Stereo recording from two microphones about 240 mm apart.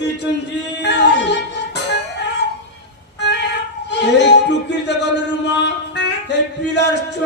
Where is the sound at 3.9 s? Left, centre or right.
Left.